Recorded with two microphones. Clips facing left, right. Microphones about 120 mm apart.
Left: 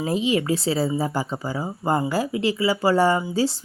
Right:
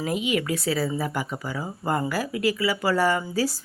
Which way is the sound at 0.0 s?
30° left (ahead or behind).